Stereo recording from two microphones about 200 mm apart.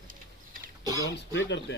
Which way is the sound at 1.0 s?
60° left (ahead or behind).